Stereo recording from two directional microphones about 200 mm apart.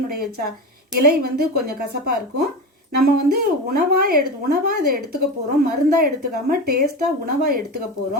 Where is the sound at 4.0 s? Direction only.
45° right (ahead or behind).